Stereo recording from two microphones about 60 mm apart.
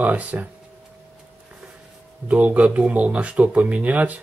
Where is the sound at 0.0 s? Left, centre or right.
Right.